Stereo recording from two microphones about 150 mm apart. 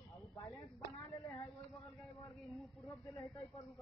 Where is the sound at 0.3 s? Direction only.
20° left (ahead or behind).